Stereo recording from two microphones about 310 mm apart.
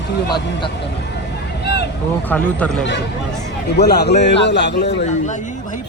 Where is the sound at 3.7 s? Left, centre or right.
Left.